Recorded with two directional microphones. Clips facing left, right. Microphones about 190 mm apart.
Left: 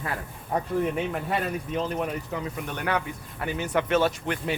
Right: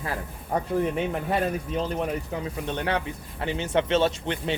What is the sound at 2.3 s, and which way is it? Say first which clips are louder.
Speech: right 2 dB; 25° right (ahead or behind).